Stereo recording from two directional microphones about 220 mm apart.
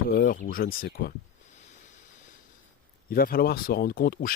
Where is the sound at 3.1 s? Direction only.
40° left (ahead or behind).